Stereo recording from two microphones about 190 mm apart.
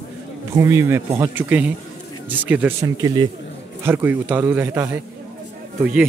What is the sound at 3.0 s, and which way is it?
A man's voice, 20° right (ahead or behind).